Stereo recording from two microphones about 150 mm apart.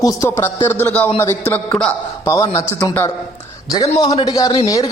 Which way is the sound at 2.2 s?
20° left (ahead or behind).